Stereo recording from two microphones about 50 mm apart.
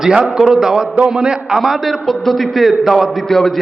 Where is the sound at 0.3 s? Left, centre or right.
Centre.